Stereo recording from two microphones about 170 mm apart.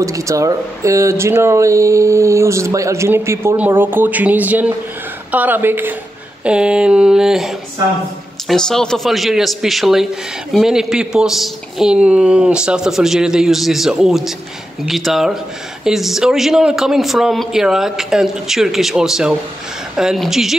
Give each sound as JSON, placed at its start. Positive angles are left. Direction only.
{"t": 0.0, "sound": "speech", "side_deg": -20}